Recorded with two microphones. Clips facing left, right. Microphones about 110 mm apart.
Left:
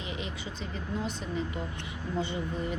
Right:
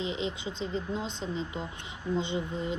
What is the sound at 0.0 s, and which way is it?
Speech, 20° right (ahead or behind).